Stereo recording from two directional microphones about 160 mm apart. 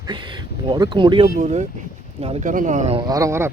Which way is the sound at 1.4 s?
45° right (ahead or behind).